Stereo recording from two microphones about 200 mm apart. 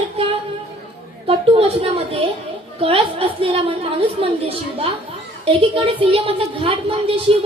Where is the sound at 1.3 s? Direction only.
30° right (ahead or behind).